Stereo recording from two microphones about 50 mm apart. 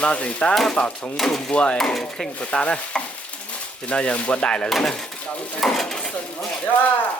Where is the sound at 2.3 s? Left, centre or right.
Left.